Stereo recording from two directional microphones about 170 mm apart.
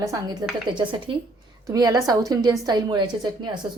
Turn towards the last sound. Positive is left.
turn(degrees=-25)  # may be behind; listen again after turning